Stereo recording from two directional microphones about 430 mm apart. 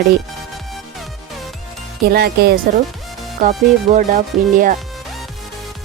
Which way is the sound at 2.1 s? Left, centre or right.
Right.